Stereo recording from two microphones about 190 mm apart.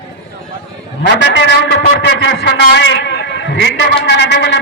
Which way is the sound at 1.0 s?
70° left (ahead or behind).